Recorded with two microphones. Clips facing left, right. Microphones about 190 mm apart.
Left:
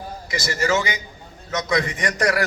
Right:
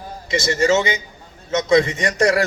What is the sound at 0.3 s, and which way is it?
Speech, 25° right (ahead or behind).